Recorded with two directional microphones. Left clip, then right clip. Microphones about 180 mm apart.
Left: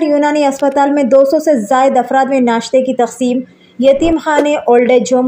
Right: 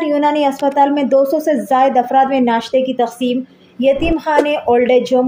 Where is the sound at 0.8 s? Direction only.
15° left (ahead or behind).